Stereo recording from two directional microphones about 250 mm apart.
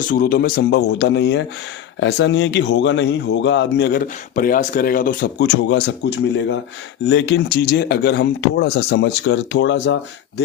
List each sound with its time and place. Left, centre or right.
0.1 s speech: left